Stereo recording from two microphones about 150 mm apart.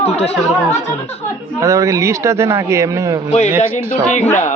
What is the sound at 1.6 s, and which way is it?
A man's voice, 20° right (ahead or behind).